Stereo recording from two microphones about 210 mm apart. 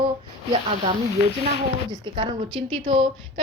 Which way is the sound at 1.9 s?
20° right (ahead or behind).